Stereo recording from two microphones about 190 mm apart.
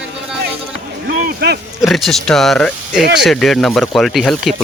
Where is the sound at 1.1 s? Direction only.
60° right (ahead or behind).